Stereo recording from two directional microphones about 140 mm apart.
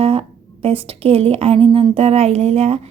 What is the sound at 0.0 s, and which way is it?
Speech, 45° right (ahead or behind).